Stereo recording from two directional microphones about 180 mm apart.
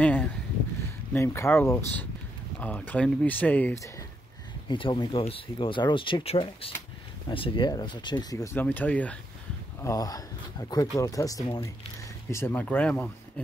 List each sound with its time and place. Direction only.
0.0 s a sound: 5° left (ahead or behind)
1.1 s speech: 15° left (ahead or behind)
4.6 s speech: 25° left (ahead or behind); by 9.2 s 5° left (ahead or behind)
9.8 s speech: 20° left (ahead or behind)